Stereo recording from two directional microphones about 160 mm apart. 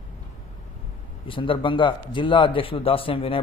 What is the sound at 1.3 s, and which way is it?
A man's voice, 30° left (ahead or behind).